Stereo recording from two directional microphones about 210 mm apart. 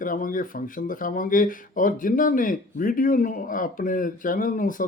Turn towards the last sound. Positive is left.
turn(degrees=40)  # may be behind; listen again after turning